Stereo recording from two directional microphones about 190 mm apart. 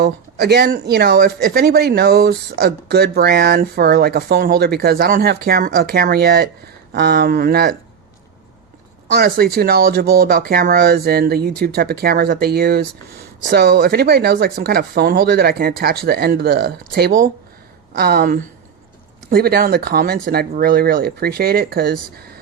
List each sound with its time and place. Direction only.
0.0 s speech: 60° right (ahead or behind)
9.1 s speech: 55° right (ahead or behind)